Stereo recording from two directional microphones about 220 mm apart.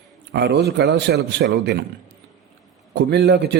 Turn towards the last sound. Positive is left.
turn(degrees=-50)  # may be behind; listen again after turning